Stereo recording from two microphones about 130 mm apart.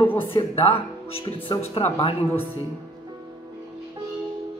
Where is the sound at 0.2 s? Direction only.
40° left (ahead or behind).